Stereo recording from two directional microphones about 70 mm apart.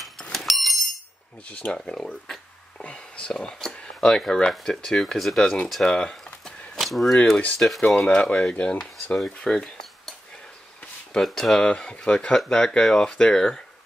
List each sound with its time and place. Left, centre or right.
0.3 s bicycle bell: centre
1.5 s speech: centre
5.7 s a sound: centre
6.8 s speech: centre
7.3 s speech: centre
11.1 s speech: centre